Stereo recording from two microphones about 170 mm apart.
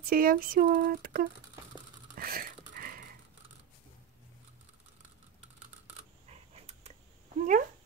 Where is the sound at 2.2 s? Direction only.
60° right (ahead or behind).